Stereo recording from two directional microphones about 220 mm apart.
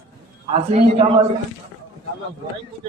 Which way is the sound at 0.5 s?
25° right (ahead or behind).